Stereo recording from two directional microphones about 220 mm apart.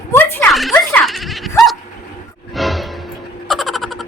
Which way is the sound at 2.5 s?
Centre (ahead or behind).